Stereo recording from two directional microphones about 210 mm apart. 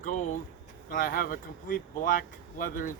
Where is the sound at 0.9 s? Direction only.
40° left (ahead or behind).